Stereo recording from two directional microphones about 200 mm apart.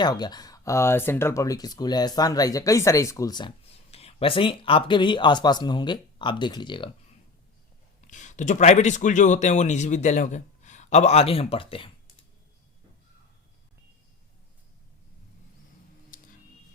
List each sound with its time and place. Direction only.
0.0 s speech: 20° left (ahead or behind)
8.0 s a man's voice: 40° left (ahead or behind)
16.1 s a sound: 45° left (ahead or behind)